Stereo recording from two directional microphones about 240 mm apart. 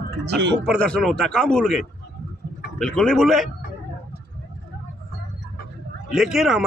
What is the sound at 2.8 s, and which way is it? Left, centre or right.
Speech, centre.